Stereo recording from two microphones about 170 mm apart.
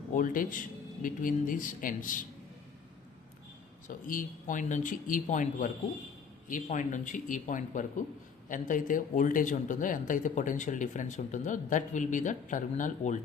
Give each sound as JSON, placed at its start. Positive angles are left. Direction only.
{"t": 0.1, "sound": "speech", "side_deg": 55}
{"t": 3.8, "sound": "speech", "side_deg": 50}